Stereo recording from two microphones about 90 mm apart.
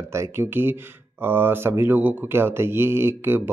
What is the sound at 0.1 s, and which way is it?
Speech, 30° right (ahead or behind).